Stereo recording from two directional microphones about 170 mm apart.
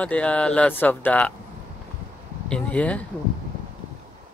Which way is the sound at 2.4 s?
5° left (ahead or behind).